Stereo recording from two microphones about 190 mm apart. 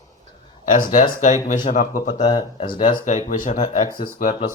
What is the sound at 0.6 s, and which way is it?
Speech, 40° left (ahead or behind).